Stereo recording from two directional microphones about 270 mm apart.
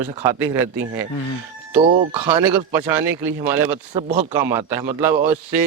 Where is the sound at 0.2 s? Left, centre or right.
Centre.